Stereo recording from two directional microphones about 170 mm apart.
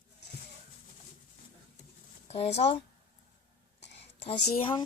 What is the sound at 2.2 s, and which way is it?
Speech, 35° left (ahead or behind).